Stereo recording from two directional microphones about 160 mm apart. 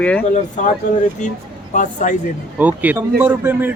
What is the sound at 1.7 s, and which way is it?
Speech, 50° left (ahead or behind).